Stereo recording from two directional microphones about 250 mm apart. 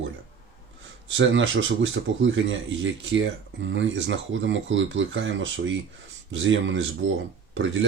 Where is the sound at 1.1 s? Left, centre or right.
Right.